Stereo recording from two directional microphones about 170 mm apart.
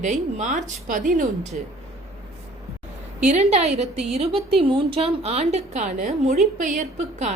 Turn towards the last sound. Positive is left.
turn(degrees=-45)  # may be behind; listen again after turning